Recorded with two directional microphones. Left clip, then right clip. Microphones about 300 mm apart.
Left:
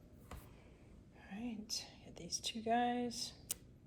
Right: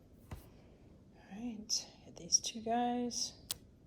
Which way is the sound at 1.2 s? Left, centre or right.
Centre.